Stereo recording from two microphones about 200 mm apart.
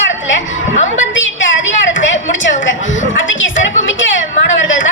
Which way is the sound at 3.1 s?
70° left (ahead or behind).